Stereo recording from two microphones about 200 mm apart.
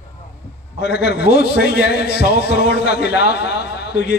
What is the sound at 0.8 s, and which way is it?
A man's voice, 55° left (ahead or behind).